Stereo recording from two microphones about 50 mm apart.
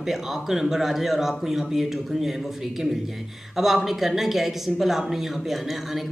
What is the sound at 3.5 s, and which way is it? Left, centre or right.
A woman's voice, centre.